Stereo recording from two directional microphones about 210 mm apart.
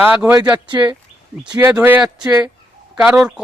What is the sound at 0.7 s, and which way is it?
Speech, 20° right (ahead or behind).